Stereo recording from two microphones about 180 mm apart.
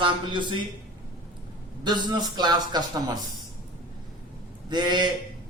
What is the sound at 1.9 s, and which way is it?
A man's voice, 25° right (ahead or behind).